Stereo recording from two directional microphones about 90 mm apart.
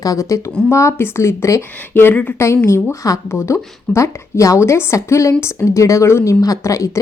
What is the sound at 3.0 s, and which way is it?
Speech, 35° left (ahead or behind).